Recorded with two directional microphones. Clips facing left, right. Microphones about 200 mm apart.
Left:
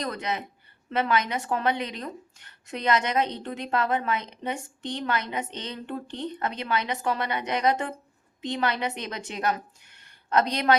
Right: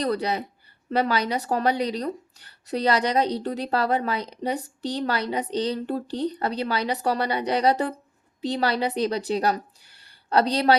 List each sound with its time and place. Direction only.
0.0 s a woman's voice: 35° right (ahead or behind)